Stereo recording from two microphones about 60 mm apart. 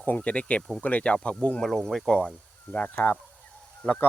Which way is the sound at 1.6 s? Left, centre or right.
Centre.